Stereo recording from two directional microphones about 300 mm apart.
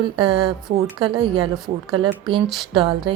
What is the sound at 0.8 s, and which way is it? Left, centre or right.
A woman's voice, centre.